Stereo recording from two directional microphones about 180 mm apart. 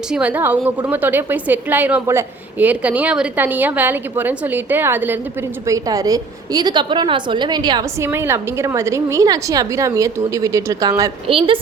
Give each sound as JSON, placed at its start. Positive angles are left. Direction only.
{"t": 0.1, "sound": "a woman's voice", "side_deg": -5}
{"t": 11.3, "sound": "a woman's voice", "side_deg": -30}